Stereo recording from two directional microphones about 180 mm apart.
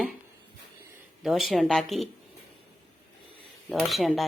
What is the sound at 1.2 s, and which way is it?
Speech, centre (ahead or behind).